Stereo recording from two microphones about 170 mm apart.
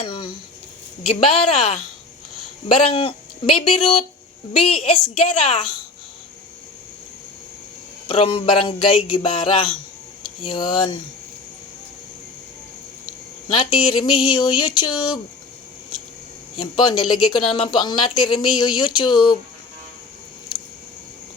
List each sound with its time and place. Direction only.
0.0 s speech: 30° left (ahead or behind)
1.0 s a sound: 35° left (ahead or behind)
8.0 s a sound: 35° left (ahead or behind)
10.4 s speech: 30° left (ahead or behind)
13.5 s speech: 30° left (ahead or behind)
16.6 s speech: 30° left (ahead or behind)